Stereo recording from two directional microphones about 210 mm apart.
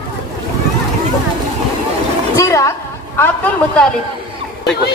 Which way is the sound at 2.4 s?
15° left (ahead or behind).